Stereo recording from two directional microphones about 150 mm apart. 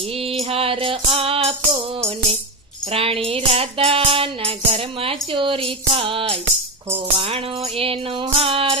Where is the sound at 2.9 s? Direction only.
40° right (ahead or behind).